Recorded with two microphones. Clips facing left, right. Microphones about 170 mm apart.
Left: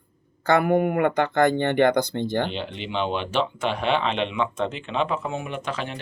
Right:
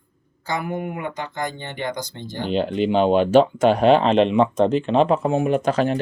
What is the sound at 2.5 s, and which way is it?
Speech, 45° right (ahead or behind).